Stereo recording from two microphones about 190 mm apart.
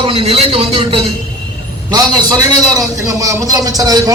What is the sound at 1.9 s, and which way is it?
A man's voice, 20° right (ahead or behind).